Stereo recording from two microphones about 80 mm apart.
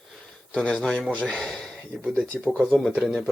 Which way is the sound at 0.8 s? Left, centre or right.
Centre.